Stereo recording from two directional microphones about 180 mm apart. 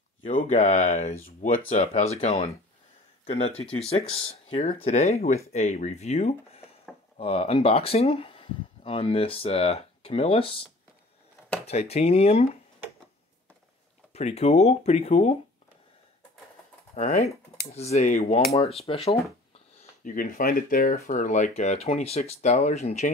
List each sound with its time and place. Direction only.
0.2 s speech: 45° left (ahead or behind); by 10.6 s 30° left (ahead or behind)
11.6 s speech: 35° left (ahead or behind)
14.1 s speech: 35° left (ahead or behind)
16.9 s speech: 40° left (ahead or behind)
20.0 s speech: 50° left (ahead or behind)